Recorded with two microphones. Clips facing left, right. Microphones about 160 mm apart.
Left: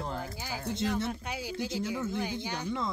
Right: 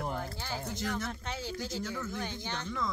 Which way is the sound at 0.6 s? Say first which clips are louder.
Left 7 dB; 30° left (ahead or behind).